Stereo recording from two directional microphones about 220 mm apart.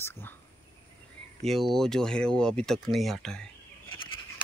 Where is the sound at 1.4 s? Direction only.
Centre (ahead or behind).